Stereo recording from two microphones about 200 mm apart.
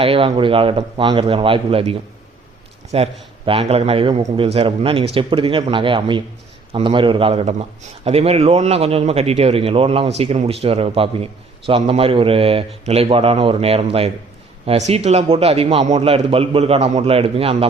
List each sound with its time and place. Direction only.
0.0 s a man's voice: 30° right (ahead or behind)